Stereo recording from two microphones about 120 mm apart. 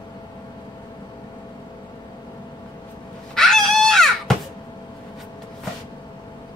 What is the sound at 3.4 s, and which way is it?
Dog, 5° left (ahead or behind).